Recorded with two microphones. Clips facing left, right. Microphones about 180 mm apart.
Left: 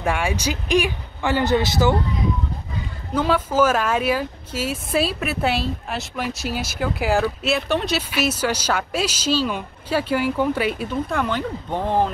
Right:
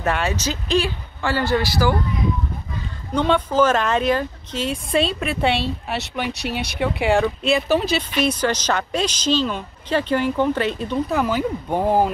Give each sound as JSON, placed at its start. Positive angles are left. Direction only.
{"t": 0.0, "sound": "speech", "side_deg": 10}
{"t": 3.2, "sound": "speech", "side_deg": 5}
{"t": 11.1, "sound": "speech", "side_deg": -5}